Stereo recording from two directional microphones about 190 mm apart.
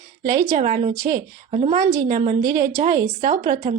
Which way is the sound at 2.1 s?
45° right (ahead or behind).